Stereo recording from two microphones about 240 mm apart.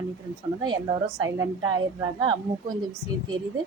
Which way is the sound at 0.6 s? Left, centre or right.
Centre.